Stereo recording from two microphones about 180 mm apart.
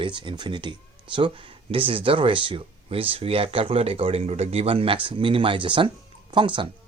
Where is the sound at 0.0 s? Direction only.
25° right (ahead or behind).